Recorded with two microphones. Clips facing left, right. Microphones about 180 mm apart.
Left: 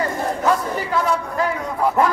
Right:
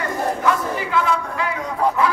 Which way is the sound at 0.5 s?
40° left (ahead or behind).